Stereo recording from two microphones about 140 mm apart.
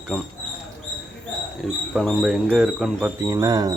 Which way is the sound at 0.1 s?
5° left (ahead or behind).